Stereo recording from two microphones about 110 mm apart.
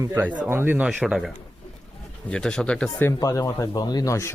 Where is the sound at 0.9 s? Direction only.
5° right (ahead or behind).